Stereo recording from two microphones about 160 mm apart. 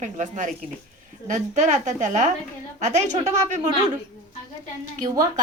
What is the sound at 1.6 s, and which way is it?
A woman's voice, 50° right (ahead or behind).